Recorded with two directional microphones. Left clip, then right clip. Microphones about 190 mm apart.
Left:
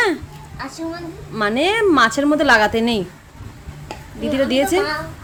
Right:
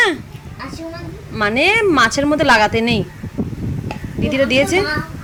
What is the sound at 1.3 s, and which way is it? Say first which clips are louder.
A woman's voice: right 3 dB; 5° left (ahead or behind).